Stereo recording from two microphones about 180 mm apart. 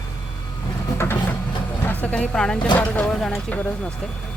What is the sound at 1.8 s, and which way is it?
Speech, 10° left (ahead or behind).